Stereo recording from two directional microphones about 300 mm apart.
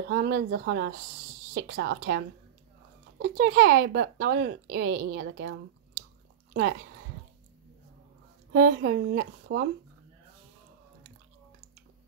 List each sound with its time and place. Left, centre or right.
0.1 s speech: right
8.5 s speech: right